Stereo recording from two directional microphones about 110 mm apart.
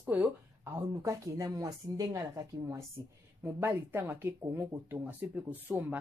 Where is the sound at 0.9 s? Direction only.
30° right (ahead or behind).